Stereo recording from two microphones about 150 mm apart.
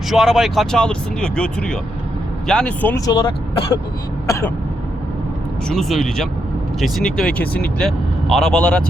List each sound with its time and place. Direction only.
0.1 s speech: centre (ahead or behind)
3.1 s speech: 30° left (ahead or behind)
4.3 s speech: 20° left (ahead or behind)
5.6 s speech: 5° left (ahead or behind)